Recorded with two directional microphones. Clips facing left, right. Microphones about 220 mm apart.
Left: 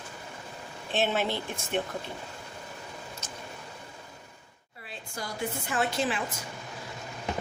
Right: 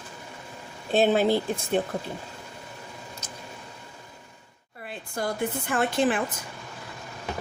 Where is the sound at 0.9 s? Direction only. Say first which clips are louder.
Right 8 dB; 40° right (ahead or behind).